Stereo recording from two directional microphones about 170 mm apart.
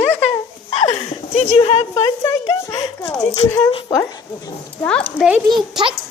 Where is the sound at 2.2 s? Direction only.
20° left (ahead or behind).